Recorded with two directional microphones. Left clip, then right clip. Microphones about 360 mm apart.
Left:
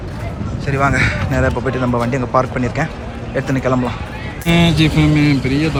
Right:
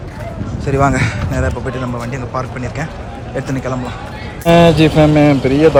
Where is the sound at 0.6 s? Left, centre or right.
Centre.